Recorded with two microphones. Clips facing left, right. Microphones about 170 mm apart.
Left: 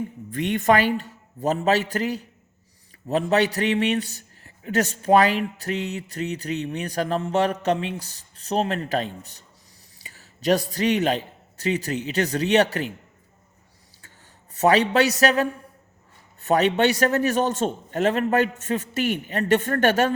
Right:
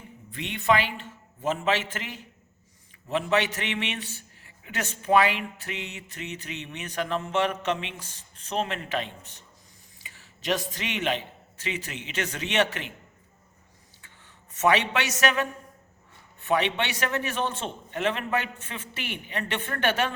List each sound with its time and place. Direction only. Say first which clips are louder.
0.3 s a man's voice: left 5 dB; 45° left (ahead or behind)
14.5 s a man's voice: left 5 dB; 35° left (ahead or behind)